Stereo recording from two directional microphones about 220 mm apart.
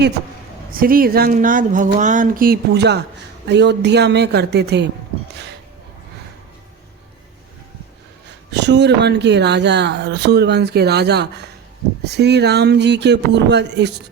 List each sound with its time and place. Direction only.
0.7 s speech: 40° right (ahead or behind)
8.5 s speech: 50° right (ahead or behind)